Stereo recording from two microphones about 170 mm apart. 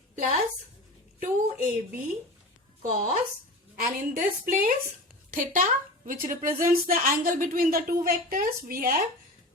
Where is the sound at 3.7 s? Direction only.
55° right (ahead or behind).